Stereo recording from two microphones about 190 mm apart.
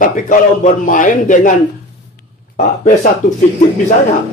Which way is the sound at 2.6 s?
45° left (ahead or behind).